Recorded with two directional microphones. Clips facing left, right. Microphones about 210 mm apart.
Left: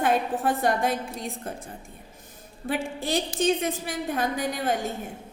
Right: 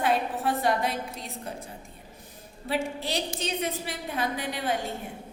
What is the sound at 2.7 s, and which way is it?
A woman's voice, 50° left (ahead or behind).